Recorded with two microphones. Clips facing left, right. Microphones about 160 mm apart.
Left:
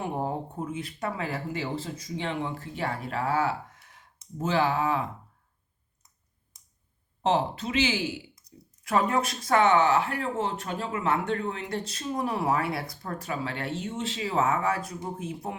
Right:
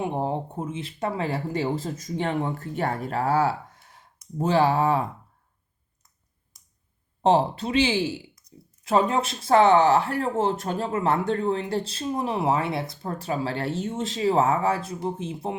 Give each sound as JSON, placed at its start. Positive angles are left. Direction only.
{"t": 0.0, "sound": "speech", "side_deg": -25}
{"t": 7.2, "sound": "speech", "side_deg": -35}
{"t": 8.5, "sound": "a sound", "side_deg": 35}
{"t": 8.8, "sound": "speech", "side_deg": -25}